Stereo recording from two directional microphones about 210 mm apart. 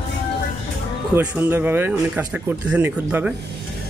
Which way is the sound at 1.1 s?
10° right (ahead or behind).